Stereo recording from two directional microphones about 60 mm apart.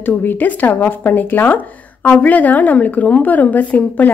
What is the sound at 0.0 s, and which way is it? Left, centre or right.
A woman's voice, left.